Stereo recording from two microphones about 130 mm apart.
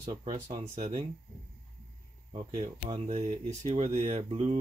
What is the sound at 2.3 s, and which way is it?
Speech, 60° right (ahead or behind).